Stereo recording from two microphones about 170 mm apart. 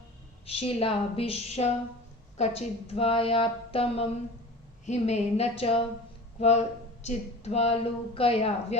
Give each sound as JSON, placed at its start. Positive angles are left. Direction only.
{"t": 0.4, "sound": "speech", "side_deg": 35}